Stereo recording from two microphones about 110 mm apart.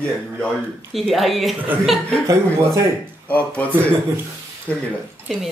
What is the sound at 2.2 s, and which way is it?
Speech, 30° right (ahead or behind).